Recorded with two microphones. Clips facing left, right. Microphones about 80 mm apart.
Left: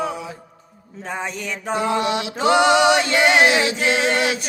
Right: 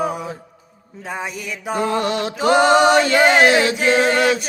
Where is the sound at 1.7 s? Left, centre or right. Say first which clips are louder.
Right 1 dB; right.